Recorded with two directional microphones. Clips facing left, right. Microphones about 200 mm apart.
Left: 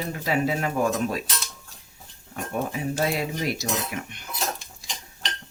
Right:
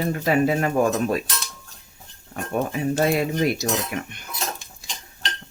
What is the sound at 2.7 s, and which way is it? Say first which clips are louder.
Speech: right 6 dB; 55° right (ahead or behind).